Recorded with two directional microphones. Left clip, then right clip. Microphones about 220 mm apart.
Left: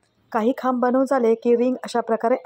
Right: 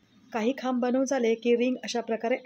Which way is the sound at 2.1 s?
5° left (ahead or behind).